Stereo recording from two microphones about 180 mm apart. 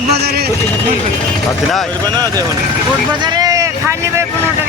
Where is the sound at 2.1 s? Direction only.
20° right (ahead or behind).